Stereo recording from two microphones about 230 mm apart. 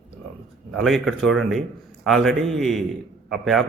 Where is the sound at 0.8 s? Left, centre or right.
Centre.